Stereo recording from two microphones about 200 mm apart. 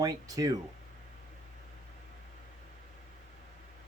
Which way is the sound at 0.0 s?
20° right (ahead or behind).